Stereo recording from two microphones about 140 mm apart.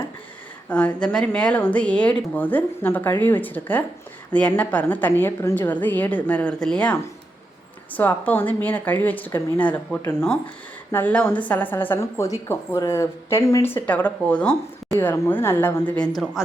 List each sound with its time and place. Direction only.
0.7 s a woman's voice: 10° left (ahead or behind)